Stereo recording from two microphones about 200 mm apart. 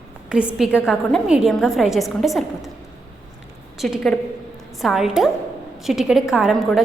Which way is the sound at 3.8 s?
Centre (ahead or behind).